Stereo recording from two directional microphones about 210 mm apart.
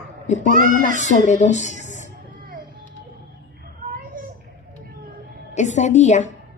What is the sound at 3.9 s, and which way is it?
Children playing, 40° right (ahead or behind).